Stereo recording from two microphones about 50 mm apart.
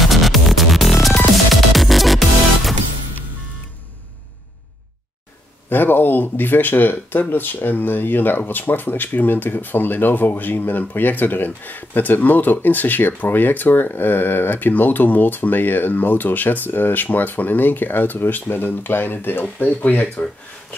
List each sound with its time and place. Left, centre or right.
0.0 s music: centre
5.7 s speech: left
19.6 s speech: left